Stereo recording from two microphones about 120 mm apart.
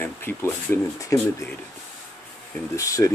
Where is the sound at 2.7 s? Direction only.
25° left (ahead or behind).